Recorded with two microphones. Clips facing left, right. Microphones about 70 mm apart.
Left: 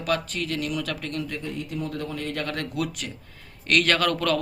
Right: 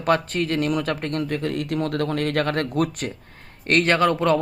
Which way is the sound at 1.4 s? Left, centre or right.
Right.